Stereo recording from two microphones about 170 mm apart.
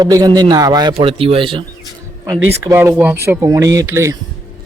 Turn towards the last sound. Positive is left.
turn(degrees=-15)  # may be behind; listen again after turning